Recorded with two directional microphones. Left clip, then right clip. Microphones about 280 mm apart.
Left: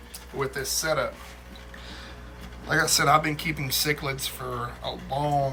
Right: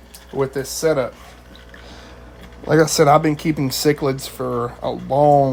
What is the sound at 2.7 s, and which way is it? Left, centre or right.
Speech, right.